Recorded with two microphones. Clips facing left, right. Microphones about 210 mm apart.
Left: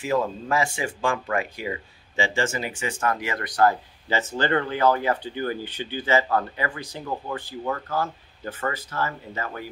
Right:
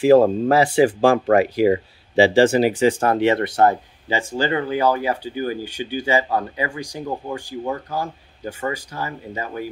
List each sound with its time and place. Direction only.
0.1 s speech: 35° right (ahead or behind)
4.1 s speech: 10° right (ahead or behind)